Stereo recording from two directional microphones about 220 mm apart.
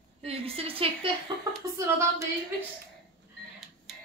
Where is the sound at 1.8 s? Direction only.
10° right (ahead or behind).